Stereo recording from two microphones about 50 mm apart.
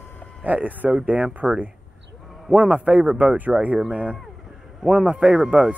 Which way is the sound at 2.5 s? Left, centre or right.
Right.